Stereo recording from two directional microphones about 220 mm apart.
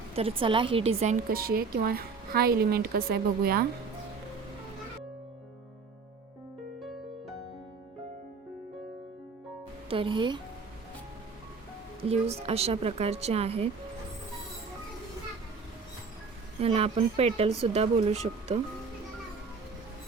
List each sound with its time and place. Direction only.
0.2 s a woman's voice: 25° right (ahead or behind); by 3.7 s 45° right (ahead or behind)
6.7 s music: centre (ahead or behind)
9.9 s a woman's voice: 20° right (ahead or behind)
11.9 s a woman's voice: 25° right (ahead or behind)
16.6 s a woman's voice: 25° right (ahead or behind)